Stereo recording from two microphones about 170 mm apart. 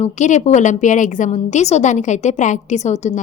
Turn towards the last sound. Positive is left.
turn(degrees=40)  # may be behind; listen again after turning